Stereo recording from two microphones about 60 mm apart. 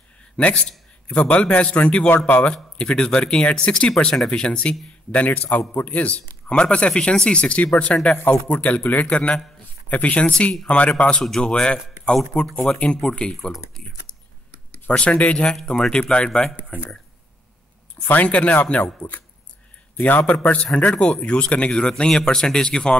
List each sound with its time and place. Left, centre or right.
0.4 s speech: centre
2.0 s speech: left
2.8 s speech: centre
14.9 s speech: left
15.5 s speech: centre
18.0 s speech: left